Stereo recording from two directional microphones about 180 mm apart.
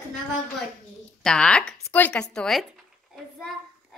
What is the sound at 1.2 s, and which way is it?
Speech, 5° left (ahead or behind).